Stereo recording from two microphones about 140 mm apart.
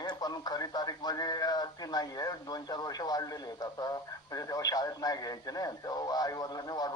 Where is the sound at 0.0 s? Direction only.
30° left (ahead or behind).